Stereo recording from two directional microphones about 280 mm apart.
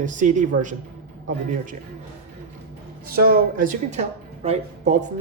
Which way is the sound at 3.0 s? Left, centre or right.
Right.